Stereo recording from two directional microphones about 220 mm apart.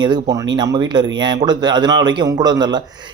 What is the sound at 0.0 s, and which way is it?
A man's voice, 20° right (ahead or behind).